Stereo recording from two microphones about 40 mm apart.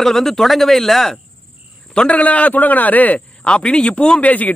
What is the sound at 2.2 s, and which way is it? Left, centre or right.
A man's voice, left.